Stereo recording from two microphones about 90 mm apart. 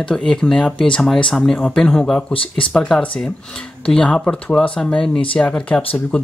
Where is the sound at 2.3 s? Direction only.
80° left.